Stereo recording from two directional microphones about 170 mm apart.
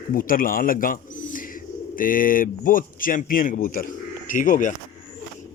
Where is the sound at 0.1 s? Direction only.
55° left (ahead or behind).